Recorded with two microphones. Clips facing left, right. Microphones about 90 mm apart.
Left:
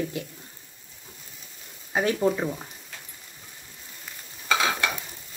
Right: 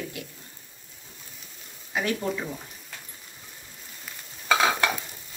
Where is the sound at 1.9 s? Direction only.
30° left (ahead or behind).